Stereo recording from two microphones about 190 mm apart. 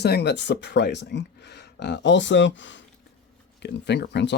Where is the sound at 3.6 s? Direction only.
65° left (ahead or behind).